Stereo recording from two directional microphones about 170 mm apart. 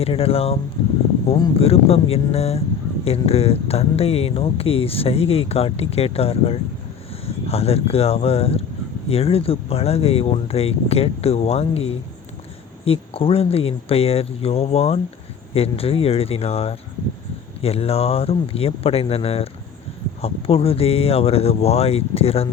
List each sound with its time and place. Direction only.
0.0 s speech: 35° left (ahead or behind)